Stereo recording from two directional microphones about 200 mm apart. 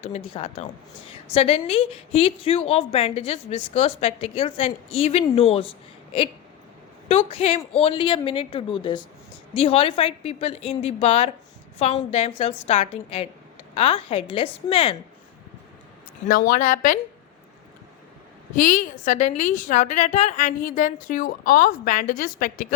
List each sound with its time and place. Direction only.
0.0 s a woman's voice: 30° left (ahead or behind)
7.1 s a woman's voice: 30° left (ahead or behind)
16.2 s a woman's voice: 40° left (ahead or behind)
18.5 s a woman's voice: 40° left (ahead or behind)